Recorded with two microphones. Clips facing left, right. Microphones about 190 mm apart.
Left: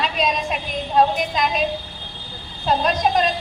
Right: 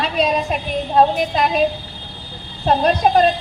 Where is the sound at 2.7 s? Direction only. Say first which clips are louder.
Right 4 dB; 45° right (ahead or behind).